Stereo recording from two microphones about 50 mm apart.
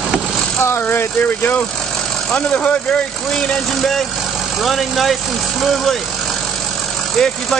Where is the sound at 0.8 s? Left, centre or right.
Left.